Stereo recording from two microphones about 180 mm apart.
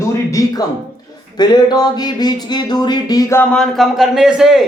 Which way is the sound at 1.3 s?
20° left (ahead or behind).